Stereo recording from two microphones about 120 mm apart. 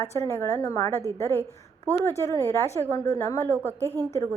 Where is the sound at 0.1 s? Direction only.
20° left (ahead or behind).